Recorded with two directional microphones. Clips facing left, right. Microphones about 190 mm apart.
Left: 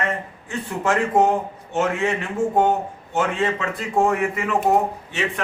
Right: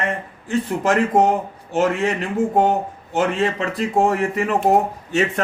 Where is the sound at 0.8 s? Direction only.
35° right (ahead or behind).